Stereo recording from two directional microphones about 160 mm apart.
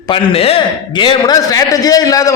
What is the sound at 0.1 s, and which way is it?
A man's voice, 35° left (ahead or behind).